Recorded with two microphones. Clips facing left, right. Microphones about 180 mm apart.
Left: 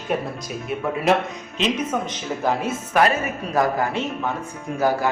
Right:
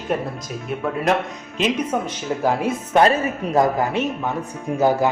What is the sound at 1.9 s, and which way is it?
Speech, 10° right (ahead or behind).